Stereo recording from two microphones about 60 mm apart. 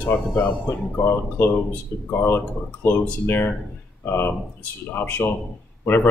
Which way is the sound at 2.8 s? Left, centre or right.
Left.